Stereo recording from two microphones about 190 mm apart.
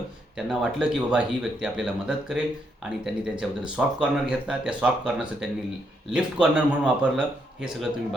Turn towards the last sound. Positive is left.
turn(degrees=-5)  # may be behind; listen again after turning